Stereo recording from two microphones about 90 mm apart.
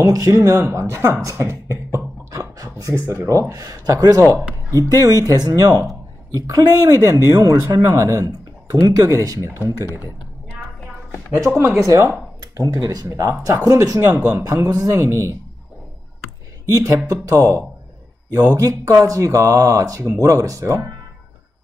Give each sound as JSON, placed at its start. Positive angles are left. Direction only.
{"t": 0.0, "sound": "speech", "side_deg": -40}
{"t": 11.3, "sound": "speech", "side_deg": -35}
{"t": 12.4, "sound": "speech", "side_deg": -50}
{"t": 16.6, "sound": "speech", "side_deg": -40}